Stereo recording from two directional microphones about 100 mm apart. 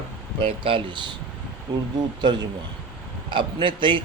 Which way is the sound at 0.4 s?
60° right (ahead or behind).